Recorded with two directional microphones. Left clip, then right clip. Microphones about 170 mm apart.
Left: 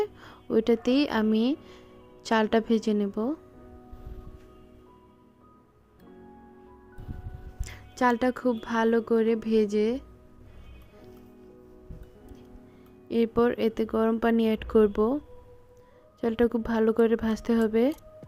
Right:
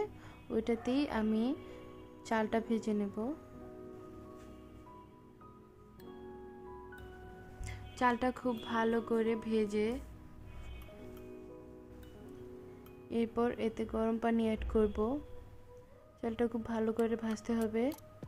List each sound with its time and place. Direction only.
0.0 s speech: 35° left (ahead or behind)
7.6 s speech: 30° left (ahead or behind)
13.1 s speech: 30° left (ahead or behind)
16.2 s speech: 35° left (ahead or behind)